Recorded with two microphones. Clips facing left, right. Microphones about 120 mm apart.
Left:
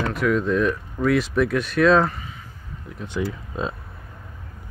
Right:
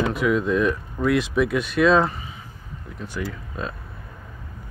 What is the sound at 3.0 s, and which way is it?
Speech, 25° left (ahead or behind).